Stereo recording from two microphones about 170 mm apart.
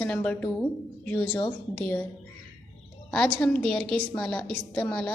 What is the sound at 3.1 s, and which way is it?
A woman's voice, 5° left (ahead or behind).